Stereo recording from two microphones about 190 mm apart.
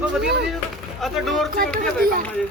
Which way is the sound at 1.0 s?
Centre (ahead or behind).